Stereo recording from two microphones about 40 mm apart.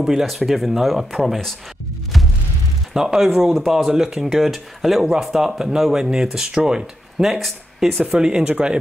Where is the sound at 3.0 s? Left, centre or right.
Centre.